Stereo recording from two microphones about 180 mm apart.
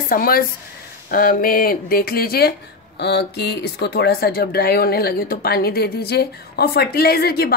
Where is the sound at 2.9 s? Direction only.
70° left (ahead or behind).